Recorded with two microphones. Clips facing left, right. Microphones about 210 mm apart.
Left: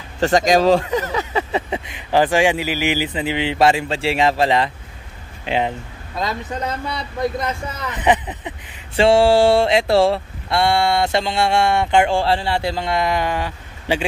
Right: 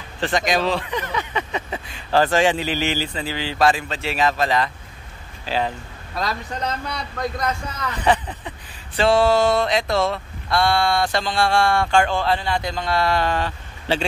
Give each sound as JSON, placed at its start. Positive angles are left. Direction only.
{"t": 0.2, "sound": "speech", "side_deg": 40}
{"t": 1.7, "sound": "speech", "side_deg": 20}
{"t": 7.2, "sound": "speech", "side_deg": 20}